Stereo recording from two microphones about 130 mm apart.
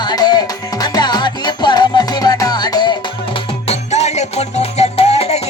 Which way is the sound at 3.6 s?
55° left (ahead or behind).